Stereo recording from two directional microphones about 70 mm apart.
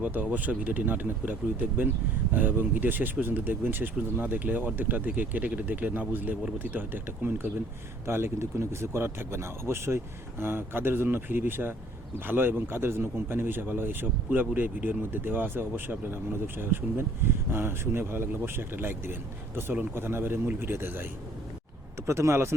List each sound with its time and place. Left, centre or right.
0.0 s speech: right